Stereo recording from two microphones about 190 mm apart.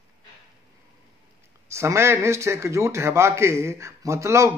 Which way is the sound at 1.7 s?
15° right (ahead or behind).